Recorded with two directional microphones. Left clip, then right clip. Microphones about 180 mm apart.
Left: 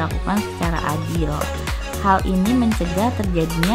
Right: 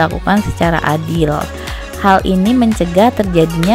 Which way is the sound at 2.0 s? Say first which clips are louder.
Right 7 dB; 35° right (ahead or behind).